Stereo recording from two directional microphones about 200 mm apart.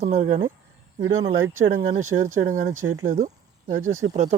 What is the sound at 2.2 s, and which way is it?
Speech, 40° right (ahead or behind).